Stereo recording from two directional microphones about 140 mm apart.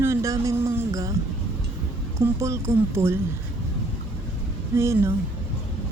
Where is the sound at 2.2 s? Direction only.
20° right (ahead or behind).